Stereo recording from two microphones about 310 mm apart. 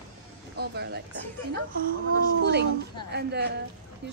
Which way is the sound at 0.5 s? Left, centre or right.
Right.